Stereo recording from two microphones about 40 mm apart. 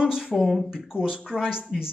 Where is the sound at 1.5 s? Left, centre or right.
Centre.